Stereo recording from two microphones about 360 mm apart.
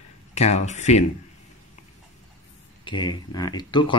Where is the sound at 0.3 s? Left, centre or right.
Centre.